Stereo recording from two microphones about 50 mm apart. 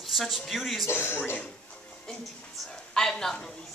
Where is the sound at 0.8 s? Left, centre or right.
Left.